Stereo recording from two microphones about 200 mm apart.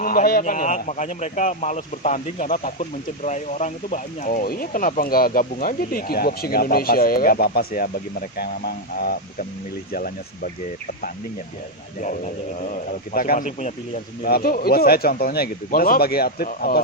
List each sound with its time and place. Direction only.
0.0 s a man's voice: 45° left (ahead or behind)
11.9 s a man's voice: 40° left (ahead or behind)
14.2 s speech: 50° left (ahead or behind)